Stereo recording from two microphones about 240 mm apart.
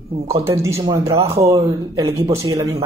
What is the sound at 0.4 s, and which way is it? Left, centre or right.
Speech, centre.